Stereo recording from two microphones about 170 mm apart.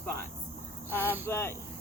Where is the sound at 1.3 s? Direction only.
15° left (ahead or behind).